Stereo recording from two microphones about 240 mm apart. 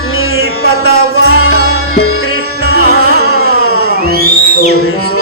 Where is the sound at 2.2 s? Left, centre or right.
Left.